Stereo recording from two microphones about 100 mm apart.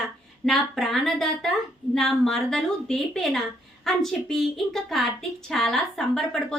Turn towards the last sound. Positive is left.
turn(degrees=5)  # may be behind; listen again after turning